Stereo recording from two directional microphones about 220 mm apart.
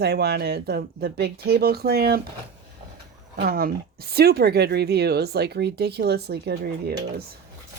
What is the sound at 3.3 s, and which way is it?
Speech, 40° right (ahead or behind).